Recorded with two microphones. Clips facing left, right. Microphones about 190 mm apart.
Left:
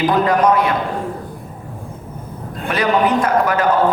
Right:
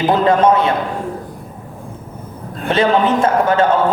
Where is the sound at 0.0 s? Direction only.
25° right (ahead or behind).